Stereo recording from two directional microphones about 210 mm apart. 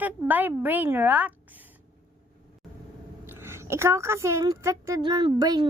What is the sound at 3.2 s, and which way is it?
A woman's voice, 10° right (ahead or behind).